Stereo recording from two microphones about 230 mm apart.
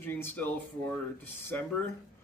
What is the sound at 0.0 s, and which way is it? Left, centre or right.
Speech, centre.